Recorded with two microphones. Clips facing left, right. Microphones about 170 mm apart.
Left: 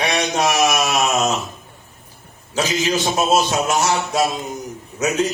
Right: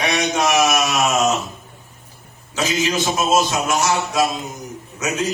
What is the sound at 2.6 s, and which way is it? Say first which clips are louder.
Speech: left 1 dB; 35° left (ahead or behind).